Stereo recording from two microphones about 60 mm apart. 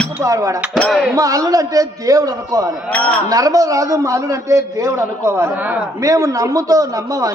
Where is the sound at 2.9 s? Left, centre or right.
Left.